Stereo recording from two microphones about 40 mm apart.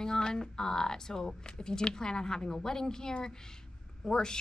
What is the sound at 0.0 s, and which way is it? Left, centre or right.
Speech, centre.